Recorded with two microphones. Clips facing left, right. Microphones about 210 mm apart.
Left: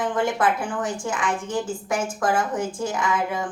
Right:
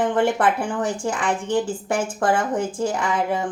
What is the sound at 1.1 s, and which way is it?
A woman's voice, 30° right (ahead or behind).